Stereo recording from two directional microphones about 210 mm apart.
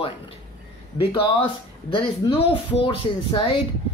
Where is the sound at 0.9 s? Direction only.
25° left (ahead or behind).